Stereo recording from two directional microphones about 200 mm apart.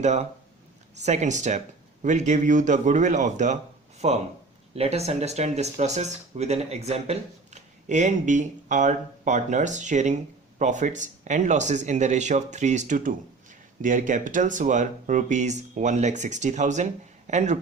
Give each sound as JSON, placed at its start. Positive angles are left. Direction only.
{"t": 0.0, "sound": "speech", "side_deg": -35}